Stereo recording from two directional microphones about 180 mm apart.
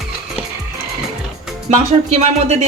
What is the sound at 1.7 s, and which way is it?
Speech, 35° right (ahead or behind).